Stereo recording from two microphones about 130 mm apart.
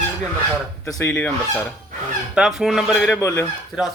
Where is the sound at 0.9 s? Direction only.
25° left (ahead or behind).